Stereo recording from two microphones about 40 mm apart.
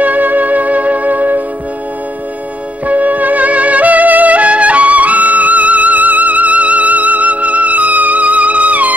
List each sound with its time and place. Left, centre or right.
0.0 s music: right
2.9 s music: right